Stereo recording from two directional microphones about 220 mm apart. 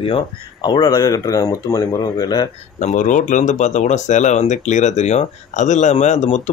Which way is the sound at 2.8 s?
35° left (ahead or behind).